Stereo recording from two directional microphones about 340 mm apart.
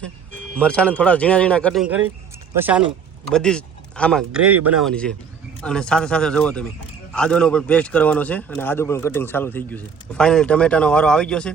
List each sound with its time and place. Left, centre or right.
0.5 s a man's voice: centre
4.3 s speech: right
4.8 s a man's voice: centre